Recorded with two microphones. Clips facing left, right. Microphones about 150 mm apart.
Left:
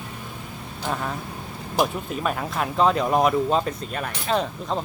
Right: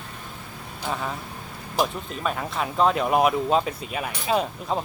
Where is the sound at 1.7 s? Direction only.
5° left (ahead or behind).